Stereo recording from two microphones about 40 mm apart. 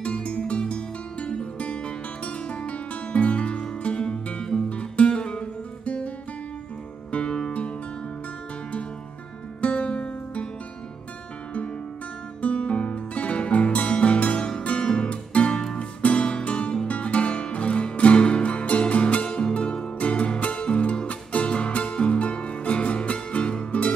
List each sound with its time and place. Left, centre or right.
0.0 s music: left
4.6 s music: left
9.6 s music: left
12.4 s music: left
14.6 s guitar: left
15.5 s music: centre
16.0 s music: left